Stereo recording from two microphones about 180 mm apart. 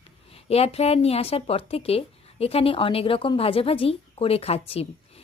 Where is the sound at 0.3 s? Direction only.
35° left (ahead or behind).